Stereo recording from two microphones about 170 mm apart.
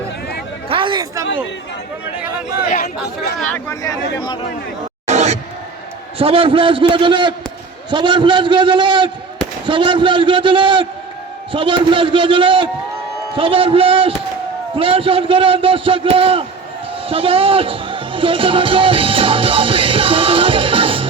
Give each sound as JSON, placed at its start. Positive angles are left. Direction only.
{"t": 0.7, "sound": "chatter", "side_deg": -30}
{"t": 2.6, "sound": "speech", "side_deg": 45}
{"t": 3.3, "sound": "speech", "side_deg": 5}
{"t": 5.0, "sound": "a sound", "side_deg": -40}
{"t": 6.1, "sound": "a man's voice", "side_deg": -35}
{"t": 17.1, "sound": "music", "side_deg": -35}